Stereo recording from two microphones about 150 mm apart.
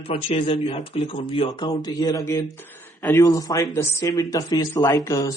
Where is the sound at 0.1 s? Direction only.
35° left (ahead or behind).